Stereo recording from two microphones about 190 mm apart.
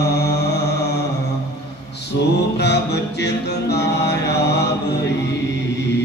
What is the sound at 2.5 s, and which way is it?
Music, 60° left (ahead or behind).